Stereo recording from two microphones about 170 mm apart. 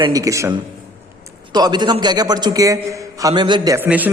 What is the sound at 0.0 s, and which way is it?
Speech, 20° right (ahead or behind).